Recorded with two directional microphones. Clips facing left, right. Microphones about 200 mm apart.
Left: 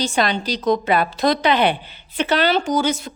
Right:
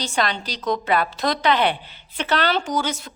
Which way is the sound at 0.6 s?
25° left (ahead or behind).